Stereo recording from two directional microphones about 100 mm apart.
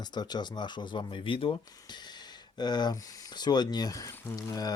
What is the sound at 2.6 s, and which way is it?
Speech, 45° left (ahead or behind).